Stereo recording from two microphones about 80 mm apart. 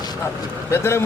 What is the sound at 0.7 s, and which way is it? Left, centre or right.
Speech, left.